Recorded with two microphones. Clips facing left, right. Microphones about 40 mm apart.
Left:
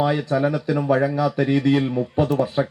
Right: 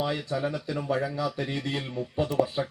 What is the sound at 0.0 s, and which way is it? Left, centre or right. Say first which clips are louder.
Speech: left 9 dB; left.